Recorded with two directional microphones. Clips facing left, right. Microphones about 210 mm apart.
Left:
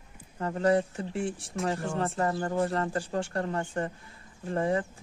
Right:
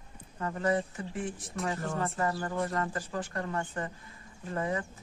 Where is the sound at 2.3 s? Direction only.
30° left (ahead or behind).